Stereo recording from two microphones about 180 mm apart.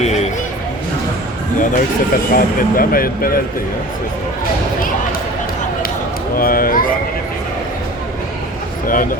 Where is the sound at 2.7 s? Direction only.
55° left (ahead or behind).